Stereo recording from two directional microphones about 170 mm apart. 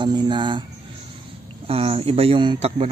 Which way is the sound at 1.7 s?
35° right (ahead or behind).